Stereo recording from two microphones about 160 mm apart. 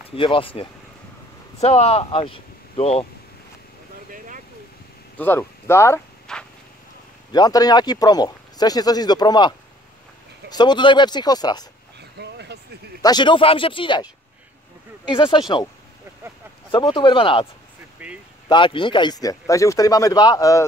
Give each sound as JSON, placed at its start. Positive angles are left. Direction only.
{"t": 0.1, "sound": "speech", "side_deg": 35}
{"t": 5.1, "sound": "speech", "side_deg": 10}
{"t": 6.3, "sound": "a sound", "side_deg": 5}
{"t": 7.3, "sound": "speech", "side_deg": 25}
{"t": 12.2, "sound": "vehicle", "side_deg": -90}
{"t": 13.0, "sound": "speech", "side_deg": 25}
{"t": 15.0, "sound": "speech", "side_deg": 30}
{"t": 16.7, "sound": "speech", "side_deg": 30}
{"t": 18.0, "sound": "speech", "side_deg": -10}
{"t": 18.5, "sound": "speech", "side_deg": 30}